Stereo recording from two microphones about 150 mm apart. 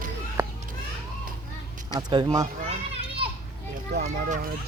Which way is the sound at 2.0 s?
30° right (ahead or behind).